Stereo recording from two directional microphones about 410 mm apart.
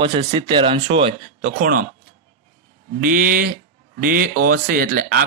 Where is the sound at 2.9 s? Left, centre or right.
Centre.